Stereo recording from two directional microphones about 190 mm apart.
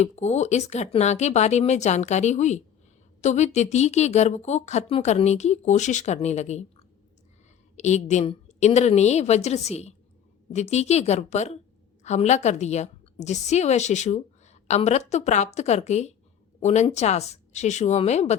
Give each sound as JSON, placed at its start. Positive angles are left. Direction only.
{"t": 0.0, "sound": "a woman's voice", "side_deg": 35}